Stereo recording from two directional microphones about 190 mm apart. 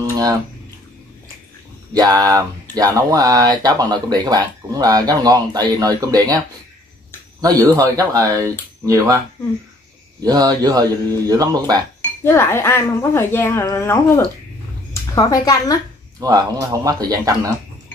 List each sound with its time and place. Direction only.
0.1 s a sound: 20° right (ahead or behind)
2.0 s speech: 20° right (ahead or behind)
7.4 s speech: 20° right (ahead or behind)
10.2 s speech: 20° right (ahead or behind)
12.2 s a woman's voice: 15° left (ahead or behind)
16.2 s speech: 20° right (ahead or behind)